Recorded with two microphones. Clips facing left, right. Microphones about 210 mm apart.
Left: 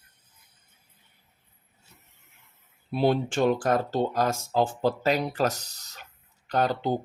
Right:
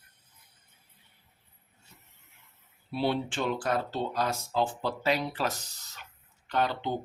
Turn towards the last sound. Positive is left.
turn(degrees=40)  # may be behind; listen again after turning